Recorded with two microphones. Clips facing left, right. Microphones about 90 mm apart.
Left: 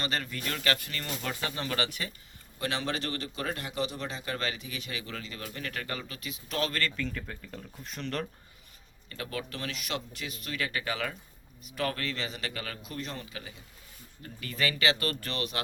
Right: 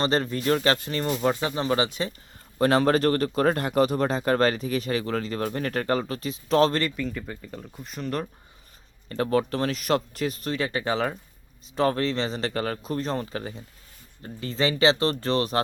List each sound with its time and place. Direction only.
0.0 s speech: 30° right (ahead or behind)
2.6 s speech: 45° right (ahead or behind)
6.8 s speech: 5° right (ahead or behind)
9.0 s speech: 40° right (ahead or behind)
14.2 s speech: 30° right (ahead or behind)